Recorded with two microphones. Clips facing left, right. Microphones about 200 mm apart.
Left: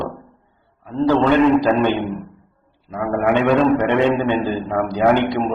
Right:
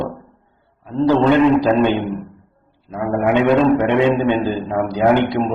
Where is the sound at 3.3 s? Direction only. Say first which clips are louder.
Right 2 dB; 15° right (ahead or behind).